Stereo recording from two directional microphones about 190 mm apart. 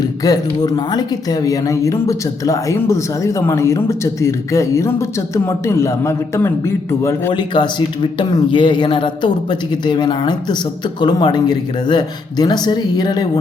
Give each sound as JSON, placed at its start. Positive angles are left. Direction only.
{"t": 0.0, "sound": "speech", "side_deg": 20}